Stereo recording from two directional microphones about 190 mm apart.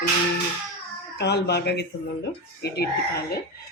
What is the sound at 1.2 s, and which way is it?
Speech, 60° left (ahead or behind).